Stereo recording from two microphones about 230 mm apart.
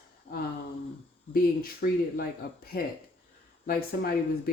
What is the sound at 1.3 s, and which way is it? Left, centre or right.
Speech, left.